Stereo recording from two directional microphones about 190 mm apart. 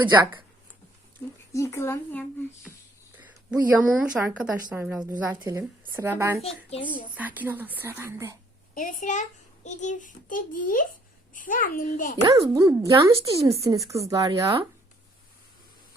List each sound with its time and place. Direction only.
1.5 s speech: 15° left (ahead or behind)
3.8 s speech: 5° right (ahead or behind)
6.4 s a child's voice: 30° left (ahead or behind)
7.2 s speech: 10° right (ahead or behind)
8.7 s a child's voice: 45° left (ahead or behind)
12.1 s speech: 25° right (ahead or behind)